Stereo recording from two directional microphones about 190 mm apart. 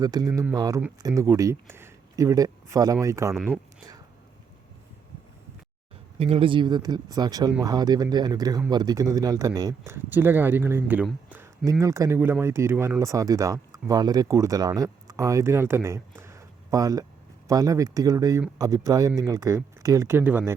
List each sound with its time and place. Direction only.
0.0 s speech: 20° right (ahead or behind)
3.3 s speech: centre (ahead or behind)
6.1 s speech: 30° right (ahead or behind); by 20.6 s 10° right (ahead or behind)